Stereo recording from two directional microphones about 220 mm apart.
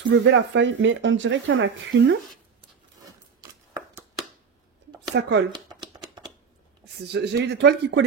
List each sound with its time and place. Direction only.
0.1 s speech: 55° right (ahead or behind)
3.1 s scissors: 15° right (ahead or behind)
5.2 s speech: 55° right (ahead or behind)
5.5 s shuffling cards: 20° right (ahead or behind)
7.0 s speech: 50° right (ahead or behind)